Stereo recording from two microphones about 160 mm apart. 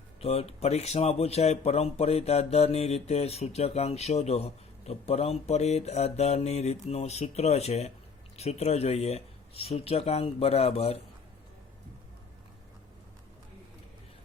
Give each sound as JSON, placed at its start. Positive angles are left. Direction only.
{"t": 0.2, "sound": "a man's voice", "side_deg": 40}